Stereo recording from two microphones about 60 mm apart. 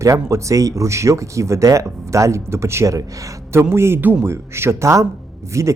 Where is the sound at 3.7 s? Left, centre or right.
Right.